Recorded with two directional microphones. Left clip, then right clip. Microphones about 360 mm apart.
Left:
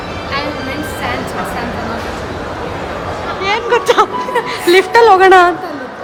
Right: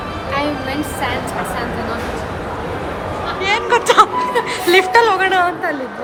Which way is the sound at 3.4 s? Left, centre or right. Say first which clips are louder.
Left 2 dB; centre.